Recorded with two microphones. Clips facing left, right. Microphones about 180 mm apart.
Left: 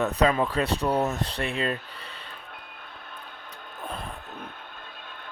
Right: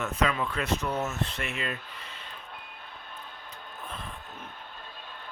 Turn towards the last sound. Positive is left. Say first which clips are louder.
# left 5 dB
turn(degrees=40)  # may be behind; listen again after turning